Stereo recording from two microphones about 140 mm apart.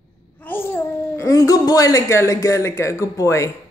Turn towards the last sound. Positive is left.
turn(degrees=20)  # may be behind; listen again after turning